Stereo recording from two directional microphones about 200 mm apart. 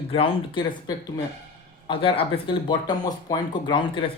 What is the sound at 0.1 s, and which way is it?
Speech, 25° left (ahead or behind).